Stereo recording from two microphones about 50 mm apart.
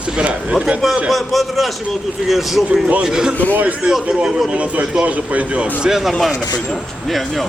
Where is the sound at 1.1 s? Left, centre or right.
Centre.